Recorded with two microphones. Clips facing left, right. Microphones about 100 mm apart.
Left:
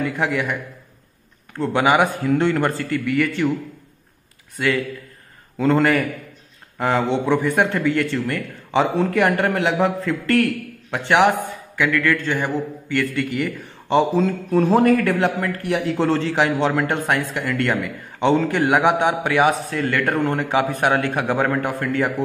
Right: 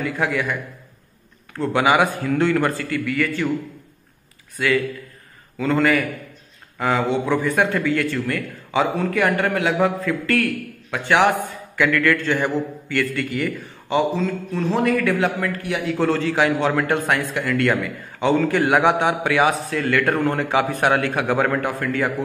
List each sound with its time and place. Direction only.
0.0 s a man's voice: 20° left (ahead or behind)
1.6 s a man's voice: 20° left (ahead or behind)
5.6 s a man's voice: 30° left (ahead or behind)
13.8 s a man's voice: 35° left (ahead or behind)
17.0 s a man's voice: 10° left (ahead or behind)
17.5 s a man's voice: 20° left (ahead or behind)